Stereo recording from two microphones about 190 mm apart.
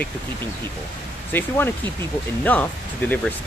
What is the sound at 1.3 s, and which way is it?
Speech, 10° left (ahead or behind).